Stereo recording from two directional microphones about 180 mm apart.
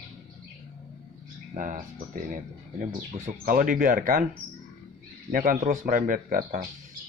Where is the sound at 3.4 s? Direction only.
50° right (ahead or behind).